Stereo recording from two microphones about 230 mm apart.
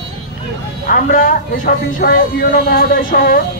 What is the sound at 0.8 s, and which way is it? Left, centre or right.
Speech, left.